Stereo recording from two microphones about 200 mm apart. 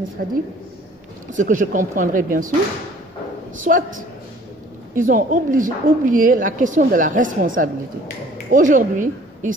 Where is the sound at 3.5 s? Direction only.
40° right (ahead or behind).